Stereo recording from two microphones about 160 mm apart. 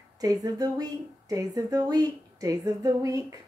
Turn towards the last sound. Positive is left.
turn(degrees=-20)  # may be behind; listen again after turning